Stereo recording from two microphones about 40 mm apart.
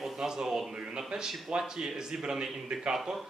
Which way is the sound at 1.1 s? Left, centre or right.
Centre.